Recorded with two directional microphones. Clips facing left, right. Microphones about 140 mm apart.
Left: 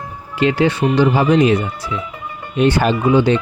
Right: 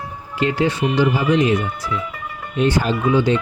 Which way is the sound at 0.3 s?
80° left.